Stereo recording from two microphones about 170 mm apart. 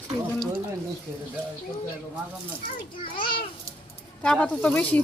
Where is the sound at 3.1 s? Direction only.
30° left (ahead or behind).